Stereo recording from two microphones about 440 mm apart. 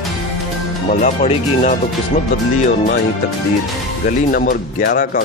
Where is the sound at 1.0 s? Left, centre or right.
Centre.